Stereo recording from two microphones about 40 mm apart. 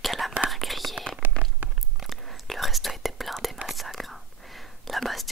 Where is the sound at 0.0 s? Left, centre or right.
Centre.